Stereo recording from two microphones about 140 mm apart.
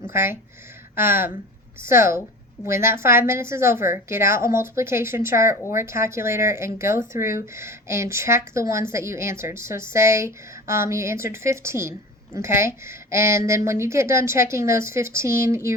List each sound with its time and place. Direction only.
0.1 s a woman's voice: 15° right (ahead or behind)